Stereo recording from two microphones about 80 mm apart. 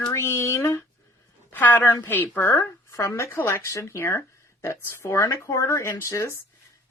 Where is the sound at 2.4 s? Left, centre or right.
Left.